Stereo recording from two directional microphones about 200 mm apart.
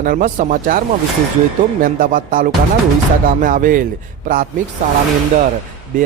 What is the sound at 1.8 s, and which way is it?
Speech, 40° right (ahead or behind).